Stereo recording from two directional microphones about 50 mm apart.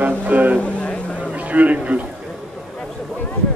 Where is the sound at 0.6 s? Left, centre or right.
Left.